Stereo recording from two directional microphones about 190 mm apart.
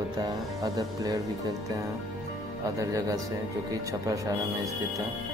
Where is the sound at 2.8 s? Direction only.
20° right (ahead or behind).